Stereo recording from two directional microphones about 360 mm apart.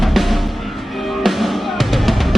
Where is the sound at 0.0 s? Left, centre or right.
Centre.